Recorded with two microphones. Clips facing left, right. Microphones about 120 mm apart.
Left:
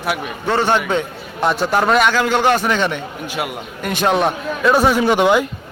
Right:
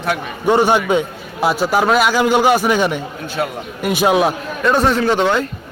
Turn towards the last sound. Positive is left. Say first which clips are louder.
# left 1 dB
turn(degrees=15)  # may be behind; listen again after turning